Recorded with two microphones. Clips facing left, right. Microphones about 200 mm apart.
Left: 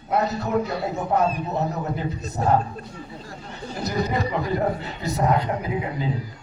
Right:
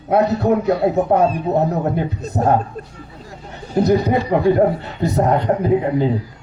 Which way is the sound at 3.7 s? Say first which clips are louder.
Right 10 dB; 55° right (ahead or behind).